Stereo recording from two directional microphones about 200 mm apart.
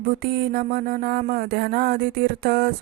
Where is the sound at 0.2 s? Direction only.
50° right (ahead or behind).